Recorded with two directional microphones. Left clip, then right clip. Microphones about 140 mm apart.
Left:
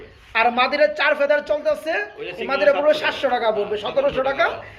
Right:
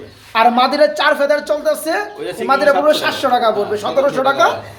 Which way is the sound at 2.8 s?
5° right (ahead or behind).